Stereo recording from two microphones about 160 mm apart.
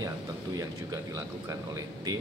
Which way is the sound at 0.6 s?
20° right (ahead or behind).